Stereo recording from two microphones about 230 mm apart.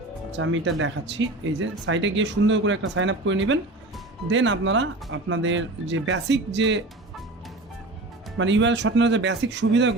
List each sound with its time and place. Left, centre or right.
0.3 s speech: right
8.4 s speech: right